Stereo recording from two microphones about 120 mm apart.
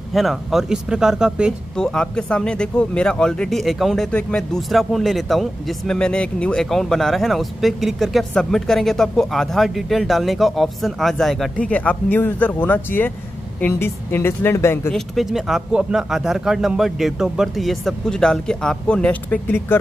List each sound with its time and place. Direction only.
0.1 s speech: centre (ahead or behind)
1.8 s speech: 5° left (ahead or behind); by 14.9 s 20° left (ahead or behind)
14.9 s speech: centre (ahead or behind)